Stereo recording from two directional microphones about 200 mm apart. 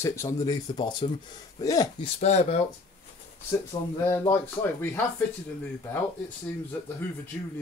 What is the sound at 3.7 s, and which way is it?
Speech, 25° left (ahead or behind).